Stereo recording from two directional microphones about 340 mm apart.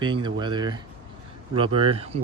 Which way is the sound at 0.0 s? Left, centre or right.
Centre.